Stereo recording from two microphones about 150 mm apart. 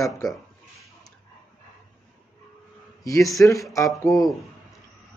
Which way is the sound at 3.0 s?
20° left (ahead or behind).